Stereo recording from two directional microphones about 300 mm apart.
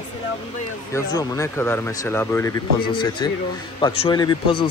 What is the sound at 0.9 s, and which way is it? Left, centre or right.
Speech, centre.